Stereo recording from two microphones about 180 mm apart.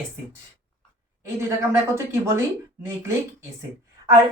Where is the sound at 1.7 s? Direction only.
15° right (ahead or behind).